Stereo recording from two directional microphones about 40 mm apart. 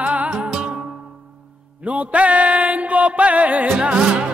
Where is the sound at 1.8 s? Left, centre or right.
Right.